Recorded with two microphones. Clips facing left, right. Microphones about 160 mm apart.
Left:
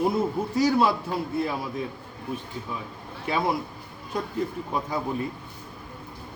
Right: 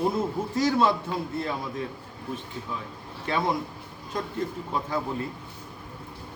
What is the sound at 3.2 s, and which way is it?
Speech, 10° left (ahead or behind).